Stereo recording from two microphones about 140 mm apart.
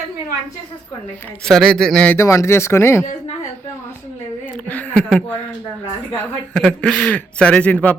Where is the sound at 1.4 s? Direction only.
5° left (ahead or behind).